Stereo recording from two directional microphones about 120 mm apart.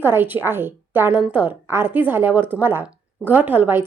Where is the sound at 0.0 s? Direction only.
20° right (ahead or behind).